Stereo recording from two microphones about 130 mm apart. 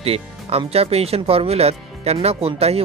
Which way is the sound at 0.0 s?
50° right (ahead or behind).